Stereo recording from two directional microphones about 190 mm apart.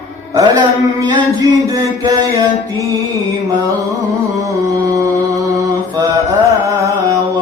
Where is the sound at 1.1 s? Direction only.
20° right (ahead or behind).